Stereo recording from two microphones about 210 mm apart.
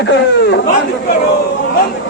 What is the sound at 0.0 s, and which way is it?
Speech, 55° left (ahead or behind).